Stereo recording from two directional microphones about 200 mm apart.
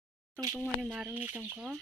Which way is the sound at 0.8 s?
Centre (ahead or behind).